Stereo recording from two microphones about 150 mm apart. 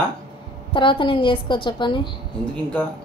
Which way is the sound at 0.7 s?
35° left (ahead or behind).